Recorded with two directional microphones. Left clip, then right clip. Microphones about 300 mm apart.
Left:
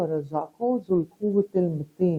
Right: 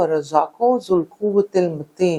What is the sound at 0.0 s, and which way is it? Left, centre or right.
Speech, centre.